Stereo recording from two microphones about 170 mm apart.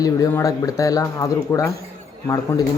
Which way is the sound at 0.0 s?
20° left (ahead or behind).